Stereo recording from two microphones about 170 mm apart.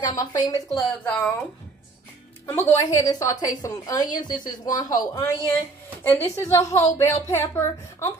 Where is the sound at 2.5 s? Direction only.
15° left (ahead or behind).